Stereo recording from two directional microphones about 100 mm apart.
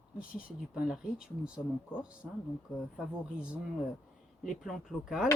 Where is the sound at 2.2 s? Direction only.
10° left (ahead or behind).